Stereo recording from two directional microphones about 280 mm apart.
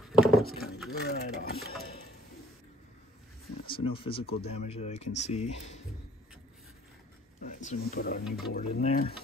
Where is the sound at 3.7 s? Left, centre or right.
Centre.